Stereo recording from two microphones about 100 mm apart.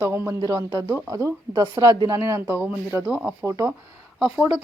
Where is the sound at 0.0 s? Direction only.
25° right (ahead or behind).